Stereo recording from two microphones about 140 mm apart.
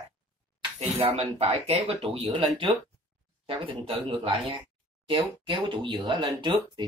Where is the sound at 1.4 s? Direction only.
45° right (ahead or behind).